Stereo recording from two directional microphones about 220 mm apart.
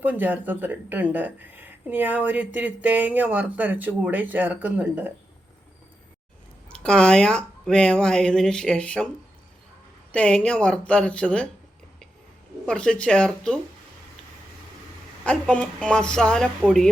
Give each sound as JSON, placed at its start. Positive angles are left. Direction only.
{"t": 0.0, "sound": "speech", "side_deg": -5}
{"t": 6.7, "sound": "speech", "side_deg": 5}
{"t": 10.1, "sound": "speech", "side_deg": 5}
{"t": 12.6, "sound": "speech", "side_deg": 5}
{"t": 15.2, "sound": "speech", "side_deg": 5}